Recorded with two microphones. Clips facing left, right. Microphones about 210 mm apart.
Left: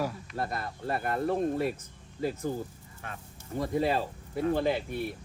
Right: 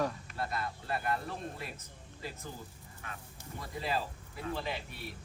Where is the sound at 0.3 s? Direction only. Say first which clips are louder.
Left 3 dB; 45° left (ahead or behind).